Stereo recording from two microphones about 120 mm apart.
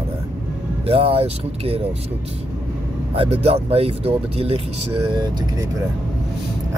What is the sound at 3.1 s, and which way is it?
Speech, 55° right (ahead or behind).